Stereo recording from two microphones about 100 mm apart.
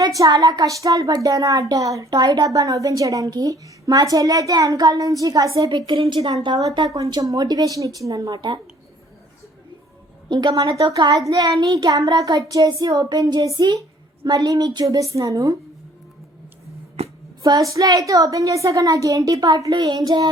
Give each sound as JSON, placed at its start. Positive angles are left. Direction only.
{"t": 0.0, "sound": "speech", "side_deg": -35}
{"t": 5.7, "sound": "a woman's voice", "side_deg": -50}
{"t": 6.4, "sound": "speech", "side_deg": -40}
{"t": 10.2, "sound": "speech", "side_deg": -45}
{"t": 17.4, "sound": "speech", "side_deg": -35}